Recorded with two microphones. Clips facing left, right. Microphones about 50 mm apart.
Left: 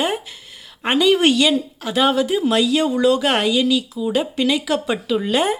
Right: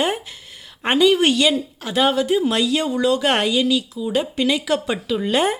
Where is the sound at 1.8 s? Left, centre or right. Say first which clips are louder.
Left 1 dB; centre.